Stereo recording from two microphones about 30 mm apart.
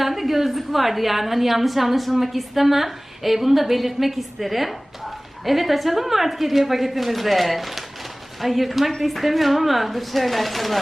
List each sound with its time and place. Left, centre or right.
0.0 s a woman's voice: centre